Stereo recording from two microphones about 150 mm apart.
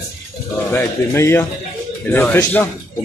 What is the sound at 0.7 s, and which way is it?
Speech, 15° left (ahead or behind).